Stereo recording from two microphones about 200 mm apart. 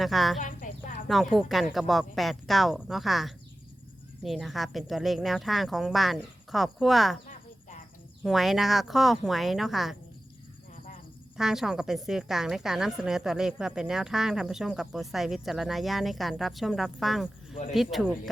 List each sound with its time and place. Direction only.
0.0 s a woman's voice: centre (ahead or behind)
0.3 s a sound: 40° left (ahead or behind)
1.0 s a woman's voice: centre (ahead or behind)
8.2 s a woman's voice: centre (ahead or behind)
11.3 s a woman's voice: centre (ahead or behind)